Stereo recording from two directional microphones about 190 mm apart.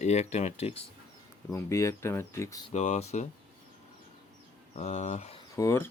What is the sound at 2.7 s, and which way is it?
Speech, 35° left (ahead or behind).